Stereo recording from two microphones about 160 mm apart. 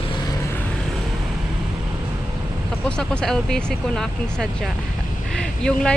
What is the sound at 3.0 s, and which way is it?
Speech, 5° left (ahead or behind).